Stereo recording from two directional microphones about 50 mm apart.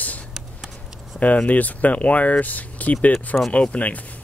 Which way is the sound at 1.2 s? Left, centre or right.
Left.